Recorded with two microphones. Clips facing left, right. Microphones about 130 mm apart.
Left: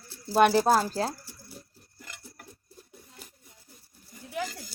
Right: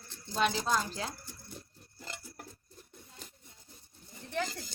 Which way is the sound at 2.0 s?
30° right (ahead or behind).